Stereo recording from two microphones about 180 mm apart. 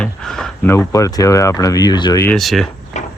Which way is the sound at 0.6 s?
15° left (ahead or behind).